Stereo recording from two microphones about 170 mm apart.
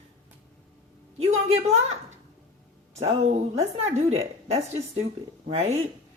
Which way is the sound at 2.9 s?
40° right (ahead or behind).